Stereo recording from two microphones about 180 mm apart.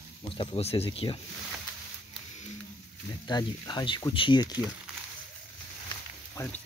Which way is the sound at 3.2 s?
25° left (ahead or behind).